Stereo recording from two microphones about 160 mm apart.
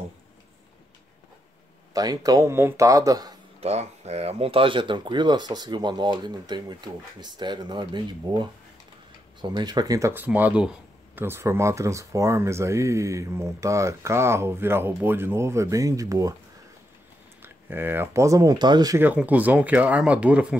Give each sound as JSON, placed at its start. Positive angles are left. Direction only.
{"t": 2.0, "sound": "speech", "side_deg": -25}
{"t": 3.6, "sound": "speech", "side_deg": -40}
{"t": 17.4, "sound": "speech", "side_deg": -15}
{"t": 18.9, "sound": "speech", "side_deg": -10}